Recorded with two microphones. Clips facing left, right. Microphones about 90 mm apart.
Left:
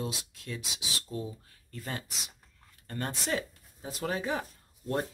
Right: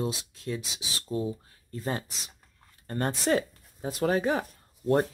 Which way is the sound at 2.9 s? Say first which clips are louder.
Right 7 dB; 40° right (ahead or behind).